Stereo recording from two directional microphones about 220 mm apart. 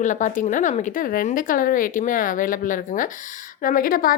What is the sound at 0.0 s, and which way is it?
A woman's voice, 35° left (ahead or behind).